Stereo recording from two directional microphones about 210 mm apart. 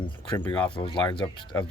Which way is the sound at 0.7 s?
25° left (ahead or behind).